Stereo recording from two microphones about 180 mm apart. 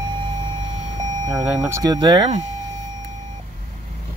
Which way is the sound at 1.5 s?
20° right (ahead or behind).